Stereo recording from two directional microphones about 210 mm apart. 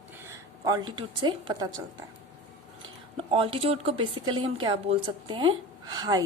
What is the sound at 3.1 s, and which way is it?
A woman's voice, 25° right (ahead or behind).